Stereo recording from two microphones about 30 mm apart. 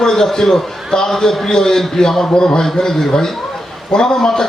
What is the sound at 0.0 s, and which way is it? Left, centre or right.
A man's voice, centre.